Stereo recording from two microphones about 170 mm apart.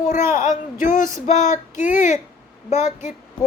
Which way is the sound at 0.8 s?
50° left (ahead or behind).